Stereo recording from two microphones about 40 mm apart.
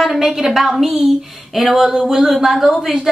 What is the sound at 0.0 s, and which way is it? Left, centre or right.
A woman's voice, centre.